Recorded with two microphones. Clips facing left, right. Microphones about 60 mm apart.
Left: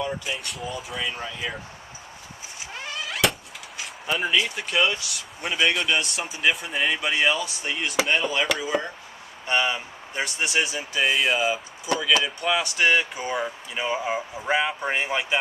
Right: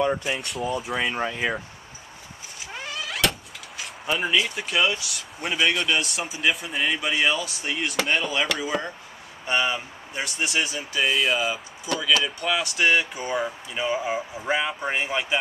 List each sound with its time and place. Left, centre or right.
0.2 s speech: centre
1.1 s speech: right
2.7 s vehicle: centre
5.1 s speech: centre
8.1 s speech: centre
13.7 s speech: centre